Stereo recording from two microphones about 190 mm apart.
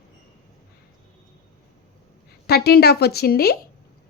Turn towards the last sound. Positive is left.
turn(degrees=55)  # may be behind; listen again after turning